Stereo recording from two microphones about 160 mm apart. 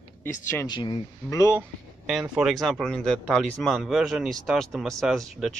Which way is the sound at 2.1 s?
5° right (ahead or behind).